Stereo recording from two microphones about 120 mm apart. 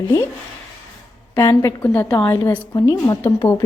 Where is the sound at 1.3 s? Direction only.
20° left (ahead or behind).